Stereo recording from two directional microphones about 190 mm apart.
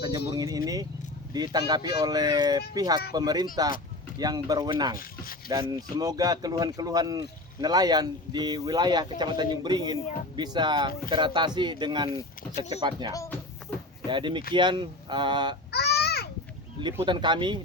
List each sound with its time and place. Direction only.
0.3 s speech: 20° right (ahead or behind)
4.9 s speech: 50° left (ahead or behind)
5.5 s speech: 20° right (ahead or behind)
15.7 s a sound: 60° left (ahead or behind)
16.8 s speech: 25° right (ahead or behind)